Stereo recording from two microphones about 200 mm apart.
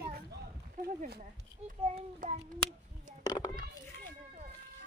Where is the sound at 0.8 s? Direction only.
50° right (ahead or behind).